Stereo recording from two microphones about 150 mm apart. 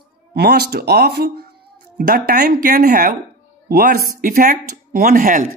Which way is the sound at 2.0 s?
70° right (ahead or behind).